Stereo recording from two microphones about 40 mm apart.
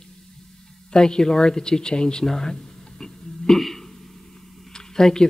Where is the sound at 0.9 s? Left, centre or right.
Centre.